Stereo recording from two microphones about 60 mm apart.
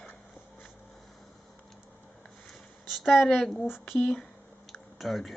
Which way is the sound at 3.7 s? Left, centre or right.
Centre.